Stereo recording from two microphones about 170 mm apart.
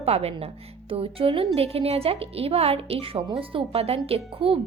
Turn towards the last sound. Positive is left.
turn(degrees=-35)  # may be behind; listen again after turning